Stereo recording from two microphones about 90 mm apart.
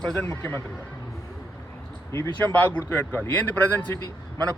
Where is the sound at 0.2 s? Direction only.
20° left (ahead or behind).